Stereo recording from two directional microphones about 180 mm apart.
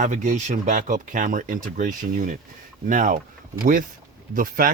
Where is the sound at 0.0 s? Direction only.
45° right (ahead or behind).